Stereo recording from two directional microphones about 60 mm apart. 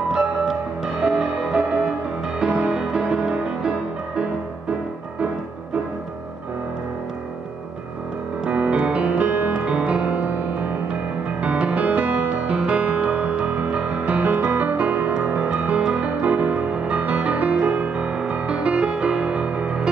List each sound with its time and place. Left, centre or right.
1.0 s music: centre
8.5 s music: centre